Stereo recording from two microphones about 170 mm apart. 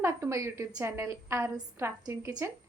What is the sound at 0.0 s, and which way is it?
A woman's voice, 15° right (ahead or behind).